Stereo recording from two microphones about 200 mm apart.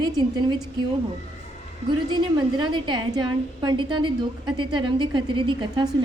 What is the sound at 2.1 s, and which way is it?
A woman's voice, 20° right (ahead or behind).